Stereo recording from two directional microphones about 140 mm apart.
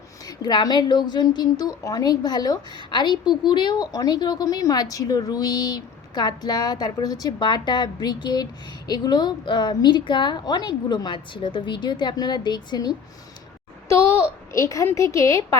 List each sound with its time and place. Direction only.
0.3 s a woman's voice: 30° left (ahead or behind)
13.8 s a child's voice: 20° left (ahead or behind)